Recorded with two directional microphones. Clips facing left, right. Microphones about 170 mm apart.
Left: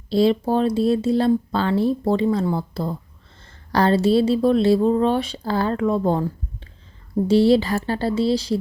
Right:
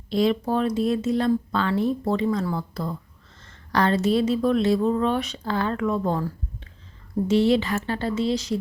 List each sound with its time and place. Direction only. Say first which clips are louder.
0.1 s speech: left 4 dB; 30° left (ahead or behind)